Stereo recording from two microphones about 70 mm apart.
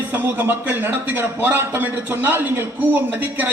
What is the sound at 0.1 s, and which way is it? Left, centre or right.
A man's voice, right.